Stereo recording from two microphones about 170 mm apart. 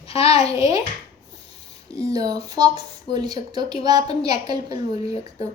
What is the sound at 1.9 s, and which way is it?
A woman's voice, 20° right (ahead or behind).